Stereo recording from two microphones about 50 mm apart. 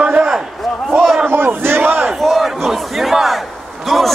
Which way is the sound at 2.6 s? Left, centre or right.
Centre.